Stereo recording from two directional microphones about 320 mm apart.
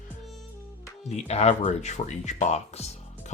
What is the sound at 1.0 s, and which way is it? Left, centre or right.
Speech, left.